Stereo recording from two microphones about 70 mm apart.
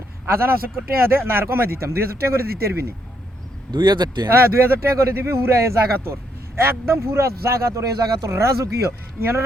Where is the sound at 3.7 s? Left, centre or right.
Right.